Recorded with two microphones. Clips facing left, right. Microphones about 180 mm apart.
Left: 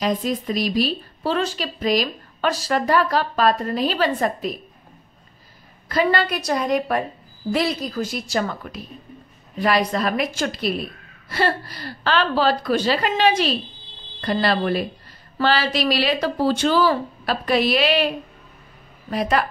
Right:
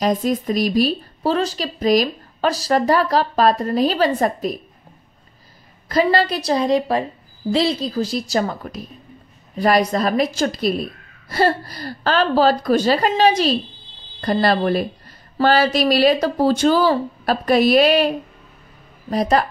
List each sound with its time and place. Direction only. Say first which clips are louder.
0.0 s a woman's voice: right 4 dB; 45° right (ahead or behind)
6.0 s a woman's voice: right 3 dB; 35° right (ahead or behind)